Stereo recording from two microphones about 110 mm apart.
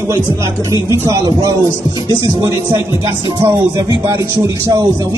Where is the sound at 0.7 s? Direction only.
25° right (ahead or behind).